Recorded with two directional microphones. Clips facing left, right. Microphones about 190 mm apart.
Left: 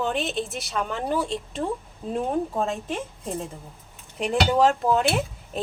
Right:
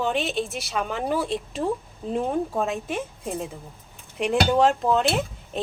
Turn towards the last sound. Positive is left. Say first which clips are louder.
# right 1 dB
turn(degrees=0)  # may be behind; listen again after turning